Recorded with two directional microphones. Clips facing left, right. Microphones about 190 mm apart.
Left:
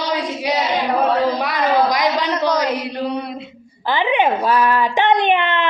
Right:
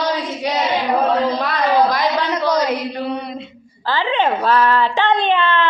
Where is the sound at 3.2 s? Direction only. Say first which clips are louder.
Even; 5° left (ahead or behind).